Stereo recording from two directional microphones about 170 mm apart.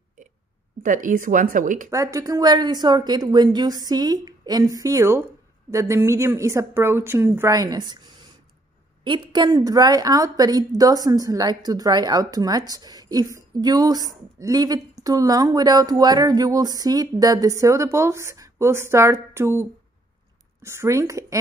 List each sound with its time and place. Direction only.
0.8 s speech: 50° right (ahead or behind)
1.9 s a woman's voice: 20° right (ahead or behind)